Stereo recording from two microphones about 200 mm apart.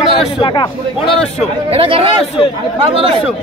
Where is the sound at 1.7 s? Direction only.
30° right (ahead or behind).